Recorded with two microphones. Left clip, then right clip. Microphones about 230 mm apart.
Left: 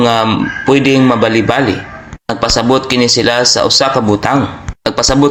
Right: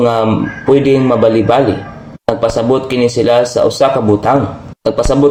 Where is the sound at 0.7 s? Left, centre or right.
Centre.